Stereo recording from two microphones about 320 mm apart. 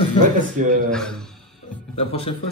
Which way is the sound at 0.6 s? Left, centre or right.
Right.